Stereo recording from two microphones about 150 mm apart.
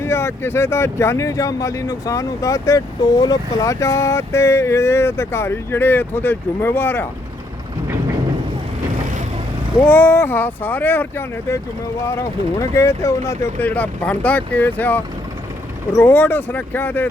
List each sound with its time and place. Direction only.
0.0 s speech: 15° left (ahead or behind)
9.8 s speech: 10° left (ahead or behind)